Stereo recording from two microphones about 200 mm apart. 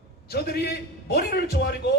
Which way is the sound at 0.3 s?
50° left (ahead or behind).